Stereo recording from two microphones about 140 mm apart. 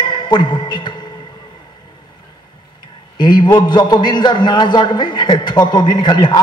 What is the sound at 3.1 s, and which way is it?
A man's voice, 30° left (ahead or behind).